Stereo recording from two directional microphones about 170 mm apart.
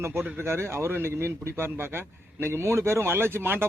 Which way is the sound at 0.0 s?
15° right (ahead or behind).